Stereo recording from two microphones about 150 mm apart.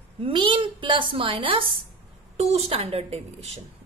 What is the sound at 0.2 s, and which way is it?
A woman's voice, 35° right (ahead or behind).